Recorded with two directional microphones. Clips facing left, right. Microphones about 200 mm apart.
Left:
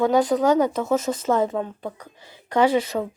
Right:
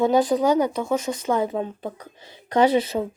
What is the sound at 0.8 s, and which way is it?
Speech, 5° left (ahead or behind).